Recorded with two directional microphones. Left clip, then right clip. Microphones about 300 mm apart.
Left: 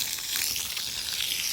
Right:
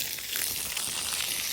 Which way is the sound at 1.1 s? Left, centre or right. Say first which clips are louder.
Left 4 dB; centre.